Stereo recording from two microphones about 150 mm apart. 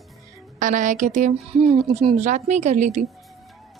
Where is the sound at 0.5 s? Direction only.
60° right (ahead or behind).